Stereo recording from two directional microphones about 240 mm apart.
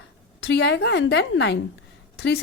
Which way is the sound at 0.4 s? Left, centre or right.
Left.